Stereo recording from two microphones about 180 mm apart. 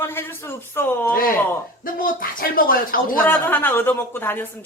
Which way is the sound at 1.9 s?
50° left (ahead or behind).